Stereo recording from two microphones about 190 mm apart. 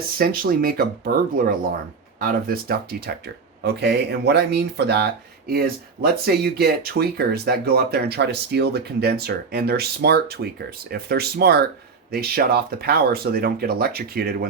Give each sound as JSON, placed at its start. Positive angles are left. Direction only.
{"t": 0.2, "sound": "speech", "side_deg": -50}